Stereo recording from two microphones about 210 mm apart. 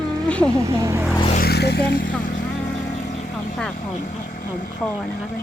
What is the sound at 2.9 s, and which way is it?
Vehicle, 35° left (ahead or behind).